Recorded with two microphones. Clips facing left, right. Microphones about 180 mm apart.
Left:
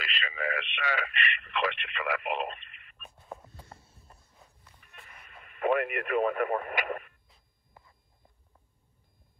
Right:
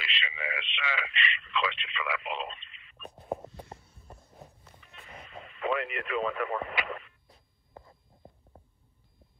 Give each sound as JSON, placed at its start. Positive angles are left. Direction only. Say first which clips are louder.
{"t": 0.0, "sound": "speech", "louder": "left 3 dB", "side_deg": 45}
{"t": 3.4, "sound": "a sound", "louder": "right 8 dB", "side_deg": -25}
{"t": 5.5, "sound": "speech", "louder": "left 4 dB", "side_deg": 50}
{"t": 8.5, "sound": "beep", "louder": "right 11 dB", "side_deg": -35}